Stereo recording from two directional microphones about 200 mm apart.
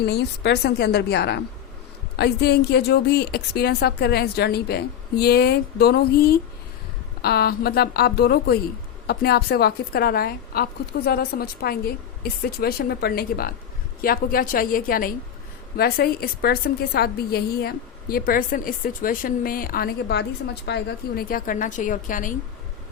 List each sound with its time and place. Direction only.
0.0 s a woman's voice: 55° left (ahead or behind)